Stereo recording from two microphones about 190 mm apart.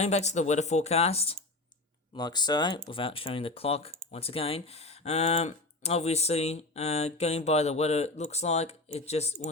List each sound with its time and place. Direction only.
0.0 s speech: 35° left (ahead or behind)